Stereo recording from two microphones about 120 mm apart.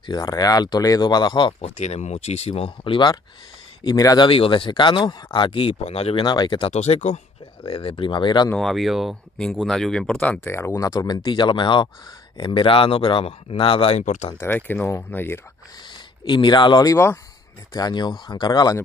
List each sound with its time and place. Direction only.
0.0 s speech: 35° left (ahead or behind)
1.6 s speech: 65° left (ahead or behind); by 4.3 s 30° left (ahead or behind)
4.3 s speech: 45° left (ahead or behind)
6.2 s speech: 40° left (ahead or behind)
6.7 s speech: 70° left (ahead or behind)
7.6 s speech: 45° left (ahead or behind)
8.5 s speech: centre (ahead or behind)
10.4 s speech: 20° left (ahead or behind); by 14.0 s 55° left (ahead or behind)
14.0 s speech: 90° left
14.4 s speech: 15° left (ahead or behind)
15.9 s speech: 40° left (ahead or behind)